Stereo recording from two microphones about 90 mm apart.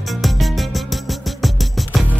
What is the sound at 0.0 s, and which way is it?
Music, centre (ahead or behind).